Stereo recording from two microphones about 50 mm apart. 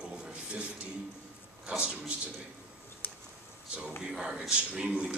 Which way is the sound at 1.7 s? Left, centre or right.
Right.